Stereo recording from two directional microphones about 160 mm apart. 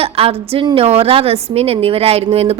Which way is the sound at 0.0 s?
35° right (ahead or behind).